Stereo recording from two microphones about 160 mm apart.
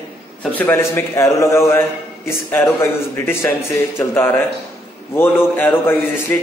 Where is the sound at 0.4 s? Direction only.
10° left (ahead or behind).